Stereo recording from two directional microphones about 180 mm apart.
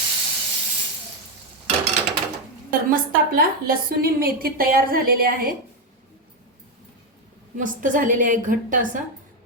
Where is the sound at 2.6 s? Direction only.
50° right (ahead or behind).